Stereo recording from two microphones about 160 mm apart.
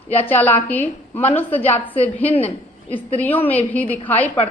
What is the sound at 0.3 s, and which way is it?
A woman's voice, 10° left (ahead or behind).